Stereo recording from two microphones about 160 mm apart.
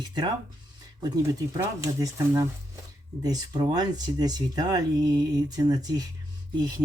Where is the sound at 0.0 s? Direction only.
25° right (ahead or behind).